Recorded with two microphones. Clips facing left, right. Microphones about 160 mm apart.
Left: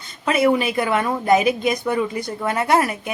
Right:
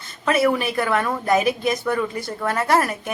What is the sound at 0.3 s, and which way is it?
Speech, 20° left (ahead or behind).